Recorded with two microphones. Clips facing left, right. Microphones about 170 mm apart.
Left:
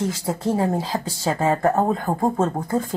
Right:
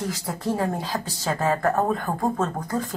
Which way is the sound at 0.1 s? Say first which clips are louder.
Left 4 dB; 25° left (ahead or behind).